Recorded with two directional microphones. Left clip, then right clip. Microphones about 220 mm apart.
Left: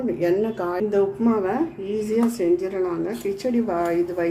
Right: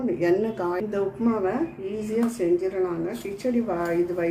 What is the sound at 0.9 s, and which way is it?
Speech, 25° left (ahead or behind).